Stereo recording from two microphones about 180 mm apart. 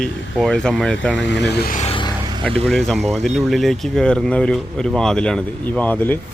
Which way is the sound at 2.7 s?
Centre (ahead or behind).